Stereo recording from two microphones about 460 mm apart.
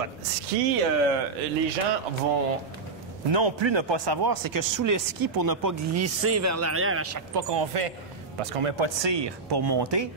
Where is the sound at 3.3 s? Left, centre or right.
Right.